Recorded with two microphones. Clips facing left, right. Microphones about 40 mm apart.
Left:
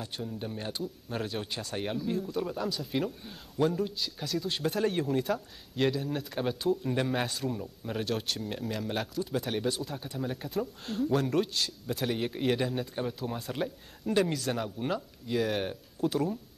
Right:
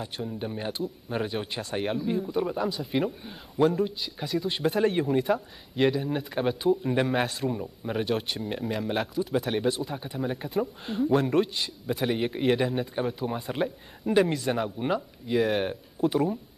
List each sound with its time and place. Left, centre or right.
0.0 s speech: centre